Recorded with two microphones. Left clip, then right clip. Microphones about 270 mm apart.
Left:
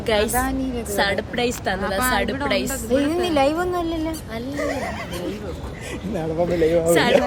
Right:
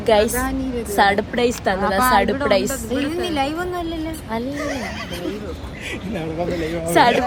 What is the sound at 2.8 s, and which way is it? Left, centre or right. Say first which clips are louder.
A woman's voice: left 2 dB; left.